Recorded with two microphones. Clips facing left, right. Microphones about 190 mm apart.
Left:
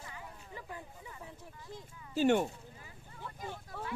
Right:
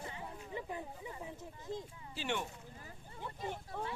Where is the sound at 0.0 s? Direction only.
25° right (ahead or behind).